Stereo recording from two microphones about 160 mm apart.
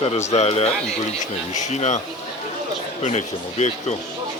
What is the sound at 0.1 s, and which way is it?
Speech, 45° left (ahead or behind).